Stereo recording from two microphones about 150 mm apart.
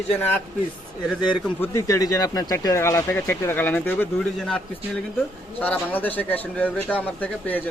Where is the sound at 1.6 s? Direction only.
20° left (ahead or behind).